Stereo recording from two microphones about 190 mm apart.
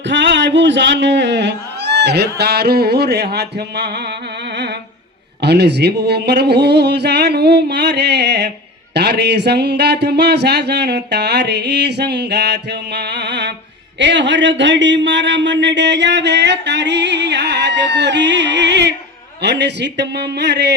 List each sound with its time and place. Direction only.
0.1 s speech: 65° right (ahead or behind)
5.4 s speech: 60° right (ahead or behind)